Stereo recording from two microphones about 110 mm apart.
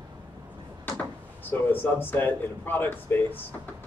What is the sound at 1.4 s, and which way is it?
Speech, 15° left (ahead or behind).